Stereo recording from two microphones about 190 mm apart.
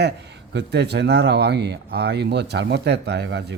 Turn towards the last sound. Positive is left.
turn(degrees=-60)  # may be behind; listen again after turning